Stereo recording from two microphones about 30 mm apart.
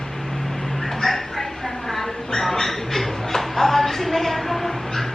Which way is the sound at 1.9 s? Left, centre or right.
Centre.